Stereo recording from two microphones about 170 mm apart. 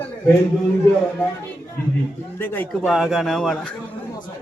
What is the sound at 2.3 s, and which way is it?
Speech, 10° left (ahead or behind).